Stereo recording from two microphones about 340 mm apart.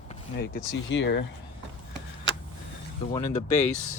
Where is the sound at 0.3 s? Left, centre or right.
Left.